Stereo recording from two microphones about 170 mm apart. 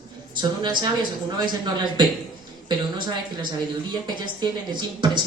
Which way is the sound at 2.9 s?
25° right (ahead or behind).